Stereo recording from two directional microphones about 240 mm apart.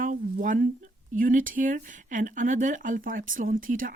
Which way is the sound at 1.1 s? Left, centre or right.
Right.